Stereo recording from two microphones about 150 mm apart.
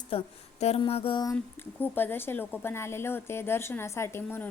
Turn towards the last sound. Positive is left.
turn(degrees=15)  # may be behind; listen again after turning